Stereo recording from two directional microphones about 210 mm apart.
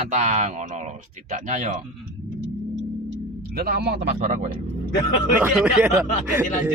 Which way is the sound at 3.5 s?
45° right (ahead or behind).